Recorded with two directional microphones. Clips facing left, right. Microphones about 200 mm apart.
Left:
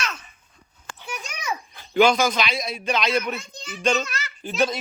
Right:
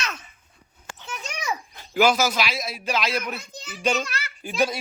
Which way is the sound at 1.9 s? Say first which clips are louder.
Left 2 dB; 5° right (ahead or behind).